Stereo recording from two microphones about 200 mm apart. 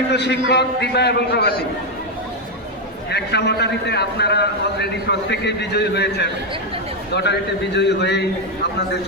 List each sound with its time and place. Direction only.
0.1 s a man's voice: 60° left (ahead or behind)
3.1 s a man's voice: 55° left (ahead or behind)